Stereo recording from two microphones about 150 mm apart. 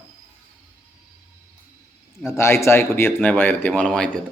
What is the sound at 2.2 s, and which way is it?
Speech, 20° left (ahead or behind).